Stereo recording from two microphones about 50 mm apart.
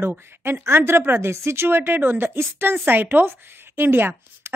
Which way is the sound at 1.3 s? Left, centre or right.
Right.